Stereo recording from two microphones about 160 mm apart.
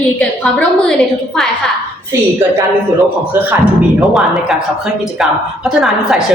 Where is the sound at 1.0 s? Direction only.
Centre (ahead or behind).